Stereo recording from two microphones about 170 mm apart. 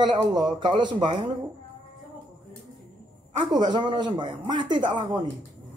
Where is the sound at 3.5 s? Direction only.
25° right (ahead or behind).